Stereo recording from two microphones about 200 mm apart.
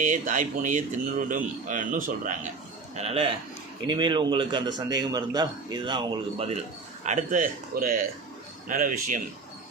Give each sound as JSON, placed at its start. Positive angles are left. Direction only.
{"t": 0.0, "sound": "a man's voice", "side_deg": -40}
{"t": 2.9, "sound": "a man's voice", "side_deg": -30}